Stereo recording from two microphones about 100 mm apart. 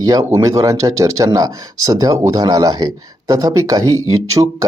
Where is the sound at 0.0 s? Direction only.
40° right (ahead or behind).